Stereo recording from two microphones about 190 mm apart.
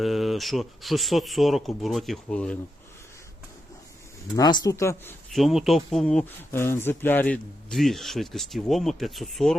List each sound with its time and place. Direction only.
0.0 s speech: centre (ahead or behind)
4.4 s speech: 20° left (ahead or behind)
5.3 s speech: centre (ahead or behind)